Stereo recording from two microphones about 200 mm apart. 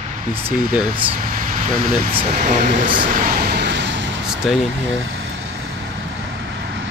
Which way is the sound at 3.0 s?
45° right (ahead or behind).